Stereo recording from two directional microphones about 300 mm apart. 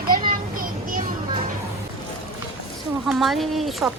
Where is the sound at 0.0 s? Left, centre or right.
Right.